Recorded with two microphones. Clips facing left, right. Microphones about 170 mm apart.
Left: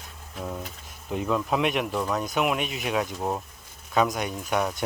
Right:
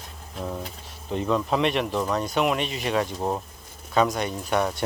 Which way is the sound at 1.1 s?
5° left (ahead or behind).